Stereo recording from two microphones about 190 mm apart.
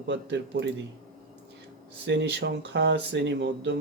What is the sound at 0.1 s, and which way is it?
Speech, 65° right (ahead or behind).